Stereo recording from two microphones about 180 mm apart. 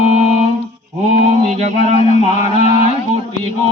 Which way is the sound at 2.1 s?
35° left (ahead or behind).